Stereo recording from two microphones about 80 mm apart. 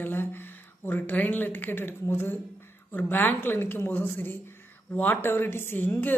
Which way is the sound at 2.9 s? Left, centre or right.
Left.